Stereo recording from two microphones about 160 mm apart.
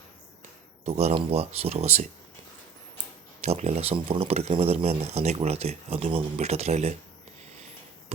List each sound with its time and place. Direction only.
0.9 s speech: 45° right (ahead or behind)
3.4 s speech: 45° right (ahead or behind)